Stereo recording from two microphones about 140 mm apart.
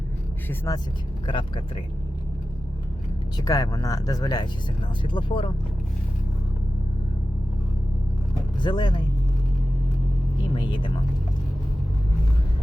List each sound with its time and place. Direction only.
1.3 s speech: 35° left (ahead or behind)
3.3 s speech: 25° left (ahead or behind)
8.6 s speech: 35° left (ahead or behind)
10.4 s speech: 35° left (ahead or behind)